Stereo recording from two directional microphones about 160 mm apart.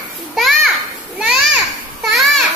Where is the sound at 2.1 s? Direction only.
Centre (ahead or behind).